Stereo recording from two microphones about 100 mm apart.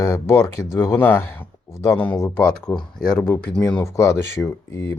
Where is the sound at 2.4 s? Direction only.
10° left (ahead or behind).